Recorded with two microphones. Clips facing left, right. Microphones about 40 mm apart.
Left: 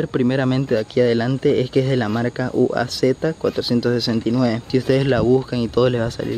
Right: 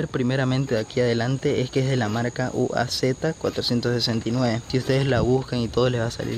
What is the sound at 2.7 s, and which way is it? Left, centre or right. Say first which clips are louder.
Speech: left 5 dB; centre.